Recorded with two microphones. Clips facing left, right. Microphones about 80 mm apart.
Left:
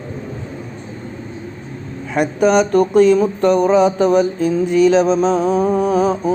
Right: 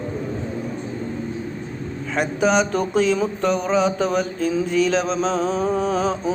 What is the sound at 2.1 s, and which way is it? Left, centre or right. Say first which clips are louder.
Mantra: left 5 dB; centre.